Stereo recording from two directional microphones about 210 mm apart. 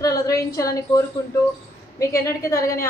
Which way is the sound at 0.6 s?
15° left (ahead or behind).